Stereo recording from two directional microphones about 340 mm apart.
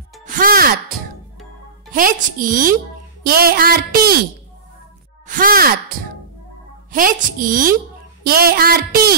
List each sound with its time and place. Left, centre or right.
0.2 s speech: right
1.9 s speech: right
5.2 s speech: right
6.9 s speech: right